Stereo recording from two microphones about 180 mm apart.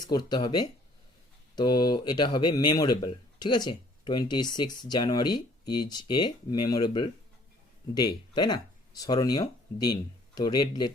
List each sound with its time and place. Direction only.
0.0 s speech: 25° left (ahead or behind)